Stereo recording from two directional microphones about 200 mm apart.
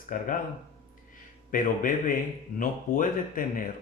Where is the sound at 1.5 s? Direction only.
40° left (ahead or behind).